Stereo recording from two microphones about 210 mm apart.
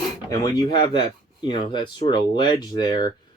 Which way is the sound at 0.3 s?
20° left (ahead or behind).